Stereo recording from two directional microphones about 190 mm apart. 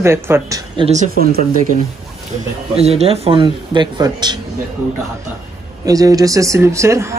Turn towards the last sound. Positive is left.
turn(degrees=-15)  # may be behind; listen again after turning